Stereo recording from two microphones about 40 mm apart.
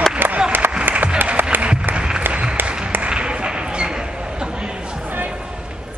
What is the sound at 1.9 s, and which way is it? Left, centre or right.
Applause, right.